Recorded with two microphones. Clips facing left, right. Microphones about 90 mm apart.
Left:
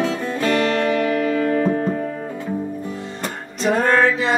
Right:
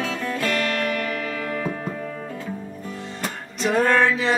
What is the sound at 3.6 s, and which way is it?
Music, centre (ahead or behind).